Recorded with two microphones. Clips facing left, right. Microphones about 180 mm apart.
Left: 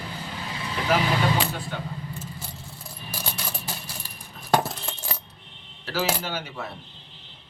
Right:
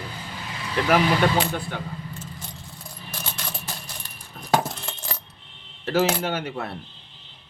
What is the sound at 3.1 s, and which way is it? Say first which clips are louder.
Mechanisms: left 1 dB; 10° left (ahead or behind).